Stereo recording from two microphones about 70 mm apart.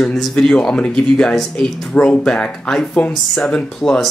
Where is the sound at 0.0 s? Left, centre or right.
Centre.